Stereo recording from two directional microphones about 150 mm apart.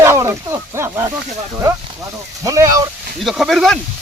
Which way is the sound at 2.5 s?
20° right (ahead or behind).